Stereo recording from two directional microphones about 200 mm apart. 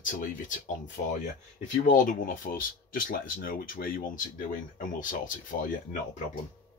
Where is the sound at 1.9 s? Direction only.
40° left (ahead or behind).